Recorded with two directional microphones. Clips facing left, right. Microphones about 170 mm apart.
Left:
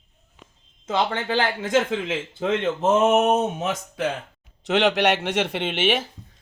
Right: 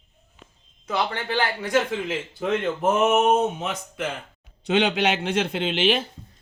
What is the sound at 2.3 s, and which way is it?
Speech, 25° left (ahead or behind).